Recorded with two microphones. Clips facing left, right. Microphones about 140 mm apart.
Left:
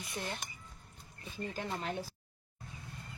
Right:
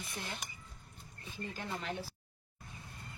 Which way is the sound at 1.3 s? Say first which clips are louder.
Left 3 dB; 40° left (ahead or behind).